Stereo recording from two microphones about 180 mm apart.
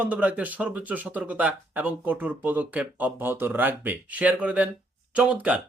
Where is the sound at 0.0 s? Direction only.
10° right (ahead or behind).